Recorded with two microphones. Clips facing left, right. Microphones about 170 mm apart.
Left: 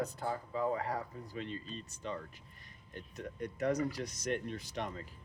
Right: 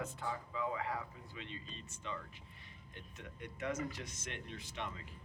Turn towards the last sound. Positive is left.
turn(degrees=40)  # may be behind; listen again after turning